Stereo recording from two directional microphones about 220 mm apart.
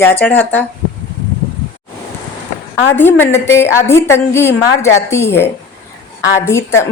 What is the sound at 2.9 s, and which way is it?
A woman's voice, 10° left (ahead or behind).